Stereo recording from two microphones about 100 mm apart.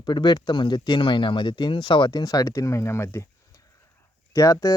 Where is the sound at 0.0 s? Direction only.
50° left (ahead or behind); by 3.2 s 25° left (ahead or behind).